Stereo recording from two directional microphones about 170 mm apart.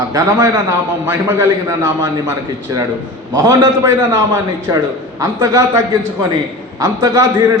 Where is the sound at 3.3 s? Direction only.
20° right (ahead or behind).